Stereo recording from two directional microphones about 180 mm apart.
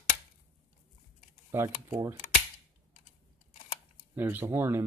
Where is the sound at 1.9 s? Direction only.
15° right (ahead or behind).